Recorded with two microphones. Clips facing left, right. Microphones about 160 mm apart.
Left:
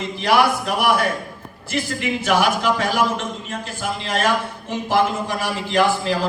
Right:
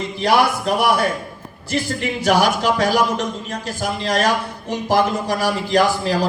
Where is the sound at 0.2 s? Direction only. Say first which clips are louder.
Right 1 dB; 30° right (ahead or behind).